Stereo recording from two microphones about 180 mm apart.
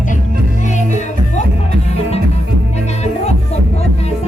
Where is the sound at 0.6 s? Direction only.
40° left (ahead or behind).